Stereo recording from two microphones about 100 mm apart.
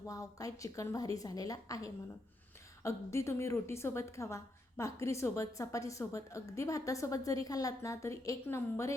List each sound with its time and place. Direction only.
0.1 s a woman's voice: 35° left (ahead or behind)